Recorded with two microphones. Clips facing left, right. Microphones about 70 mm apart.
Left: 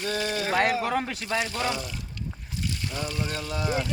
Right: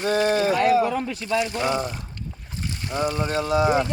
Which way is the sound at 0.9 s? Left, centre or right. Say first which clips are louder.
Right 2 dB; left.